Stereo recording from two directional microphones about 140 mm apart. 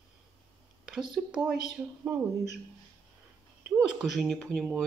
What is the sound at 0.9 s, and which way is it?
A woman's voice, 5° right (ahead or behind).